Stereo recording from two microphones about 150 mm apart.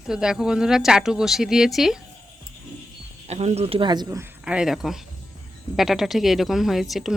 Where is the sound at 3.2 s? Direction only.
45° right (ahead or behind); by 4.3 s 20° right (ahead or behind).